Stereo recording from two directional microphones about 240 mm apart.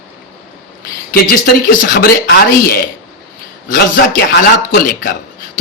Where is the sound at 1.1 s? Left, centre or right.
Left.